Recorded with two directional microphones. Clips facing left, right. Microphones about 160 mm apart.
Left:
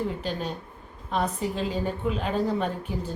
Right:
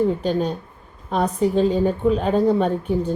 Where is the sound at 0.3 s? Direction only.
40° right (ahead or behind).